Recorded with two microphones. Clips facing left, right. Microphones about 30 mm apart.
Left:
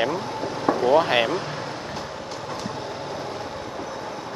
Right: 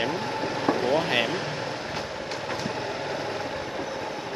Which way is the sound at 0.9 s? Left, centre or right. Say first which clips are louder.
Left 5 dB; centre.